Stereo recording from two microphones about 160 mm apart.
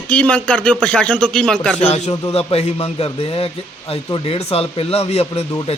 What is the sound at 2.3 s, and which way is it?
A man's voice, 40° left (ahead or behind).